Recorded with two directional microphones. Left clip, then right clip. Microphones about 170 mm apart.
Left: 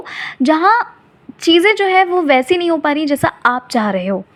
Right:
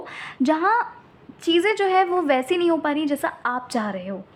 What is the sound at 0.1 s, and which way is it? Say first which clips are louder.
A woman's voice: left 8 dB; 15° left (ahead or behind).